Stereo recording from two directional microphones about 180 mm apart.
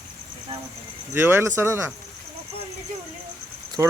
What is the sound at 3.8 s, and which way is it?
Speech, 15° right (ahead or behind).